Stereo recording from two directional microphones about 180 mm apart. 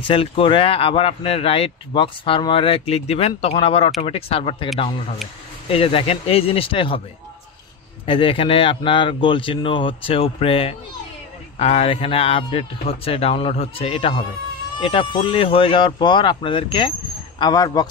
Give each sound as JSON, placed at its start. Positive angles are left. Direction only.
{"t": 0.0, "sound": "speech", "side_deg": 30}
{"t": 8.0, "sound": "speech", "side_deg": 30}